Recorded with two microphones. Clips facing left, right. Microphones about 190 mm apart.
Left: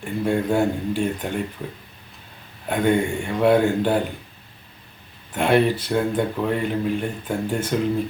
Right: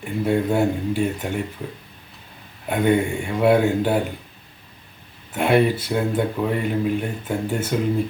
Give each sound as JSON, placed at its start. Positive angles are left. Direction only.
{"t": 0.0, "sound": "speech", "side_deg": -5}
{"t": 2.6, "sound": "speech", "side_deg": -5}
{"t": 5.3, "sound": "speech", "side_deg": -5}